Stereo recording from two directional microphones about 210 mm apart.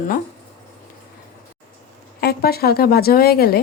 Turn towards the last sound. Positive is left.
turn(degrees=45)  # may be behind; listen again after turning